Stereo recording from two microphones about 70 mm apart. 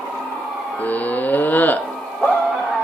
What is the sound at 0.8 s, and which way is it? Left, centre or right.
Music, left.